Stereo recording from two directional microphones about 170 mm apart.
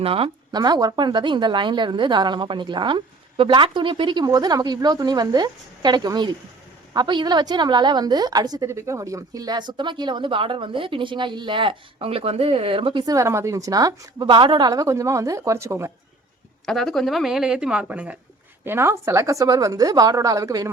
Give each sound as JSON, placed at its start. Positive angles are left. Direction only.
{"t": 0.0, "sound": "a woman's voice", "side_deg": -35}
{"t": 14.7, "sound": "speech", "side_deg": -20}
{"t": 16.6, "sound": "a woman's voice", "side_deg": 0}